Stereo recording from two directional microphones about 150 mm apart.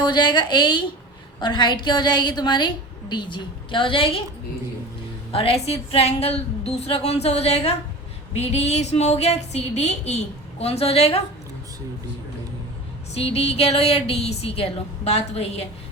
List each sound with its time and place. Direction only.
0.0 s a woman's voice: 30° left (ahead or behind)
5.3 s a woman's voice: 40° left (ahead or behind)
13.1 s a woman's voice: 45° left (ahead or behind)